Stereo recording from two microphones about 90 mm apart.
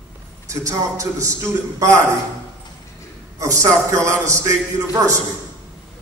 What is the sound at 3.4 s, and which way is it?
A man's voice, 35° right (ahead or behind).